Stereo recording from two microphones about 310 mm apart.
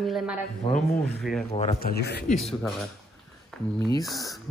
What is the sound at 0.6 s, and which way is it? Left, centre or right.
Speech, centre.